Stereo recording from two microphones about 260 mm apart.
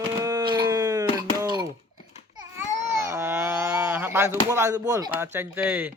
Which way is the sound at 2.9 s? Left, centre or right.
Centre.